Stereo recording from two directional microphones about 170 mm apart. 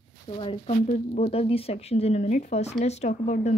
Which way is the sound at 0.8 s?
45° left (ahead or behind).